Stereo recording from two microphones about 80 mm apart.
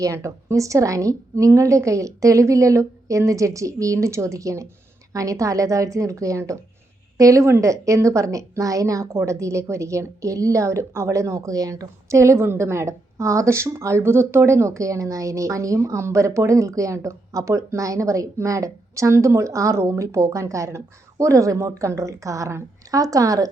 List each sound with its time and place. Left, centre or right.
0.0 s a woman's voice: right